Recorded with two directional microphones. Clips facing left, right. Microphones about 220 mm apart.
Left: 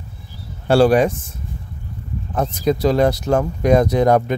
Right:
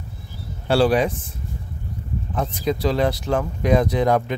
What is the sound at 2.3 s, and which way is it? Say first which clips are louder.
Speech: left 5 dB; 45° left (ahead or behind).